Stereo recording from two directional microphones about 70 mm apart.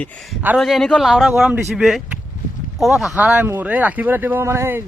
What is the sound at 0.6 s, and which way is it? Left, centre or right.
Speech, centre.